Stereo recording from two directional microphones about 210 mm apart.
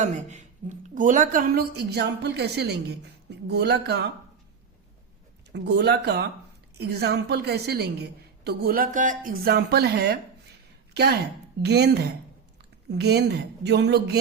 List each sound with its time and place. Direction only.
0.0 s a woman's voice: 35° right (ahead or behind); by 4.1 s 50° right (ahead or behind)
5.5 s a woman's voice: 55° right (ahead or behind)